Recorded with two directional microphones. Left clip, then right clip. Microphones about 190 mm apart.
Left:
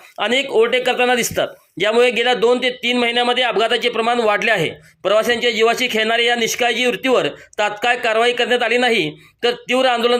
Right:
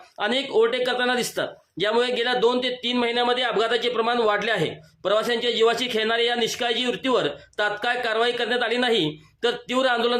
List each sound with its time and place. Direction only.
0.2 s speech: 20° left (ahead or behind)